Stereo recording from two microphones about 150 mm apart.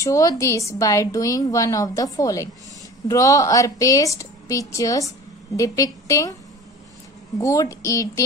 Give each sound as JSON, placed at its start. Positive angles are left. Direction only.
{"t": 0.0, "sound": "a woman's voice", "side_deg": 20}
{"t": 7.3, "sound": "a woman's voice", "side_deg": 20}